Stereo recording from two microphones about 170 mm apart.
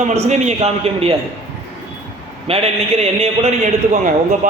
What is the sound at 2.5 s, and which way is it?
A man's voice, 35° right (ahead or behind).